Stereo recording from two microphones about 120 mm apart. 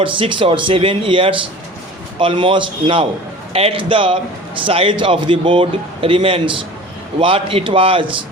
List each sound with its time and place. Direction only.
0.0 s a man's voice: 45° right (ahead or behind)